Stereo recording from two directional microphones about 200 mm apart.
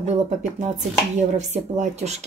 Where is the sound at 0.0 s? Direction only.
35° right (ahead or behind).